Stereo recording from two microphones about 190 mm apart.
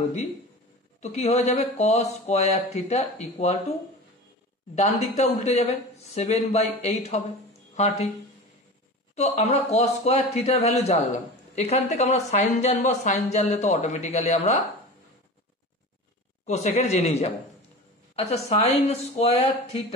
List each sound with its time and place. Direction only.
1.0 s speech: 35° left (ahead or behind)
4.7 s speech: 35° left (ahead or behind)
9.1 s speech: 35° left (ahead or behind)
16.4 s speech: 35° left (ahead or behind)